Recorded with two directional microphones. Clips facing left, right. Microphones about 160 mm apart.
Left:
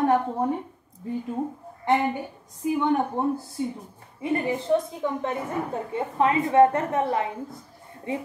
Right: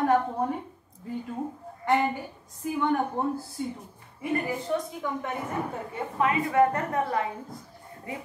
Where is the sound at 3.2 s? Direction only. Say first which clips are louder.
Left 3 dB; 20° left (ahead or behind).